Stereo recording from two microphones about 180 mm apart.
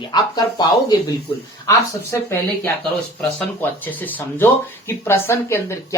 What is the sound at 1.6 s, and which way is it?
Speech, 15° left (ahead or behind).